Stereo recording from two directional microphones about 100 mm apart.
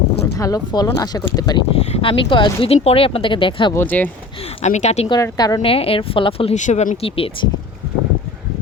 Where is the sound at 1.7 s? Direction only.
90° left; by 3.7 s 60° left (ahead or behind).